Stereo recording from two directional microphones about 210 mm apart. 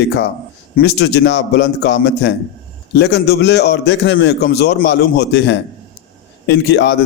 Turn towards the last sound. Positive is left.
turn(degrees=55)  # may be behind; listen again after turning